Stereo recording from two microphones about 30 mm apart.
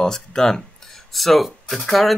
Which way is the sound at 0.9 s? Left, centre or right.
Centre.